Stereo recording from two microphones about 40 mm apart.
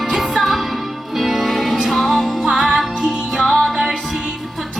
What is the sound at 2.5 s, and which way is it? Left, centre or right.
Music, centre.